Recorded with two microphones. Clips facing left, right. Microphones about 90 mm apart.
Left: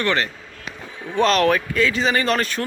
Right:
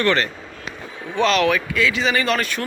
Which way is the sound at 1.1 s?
40° left (ahead or behind).